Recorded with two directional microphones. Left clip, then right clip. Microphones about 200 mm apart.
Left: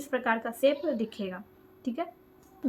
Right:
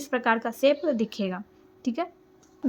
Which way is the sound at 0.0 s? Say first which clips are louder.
Right 4 dB; 35° right (ahead or behind).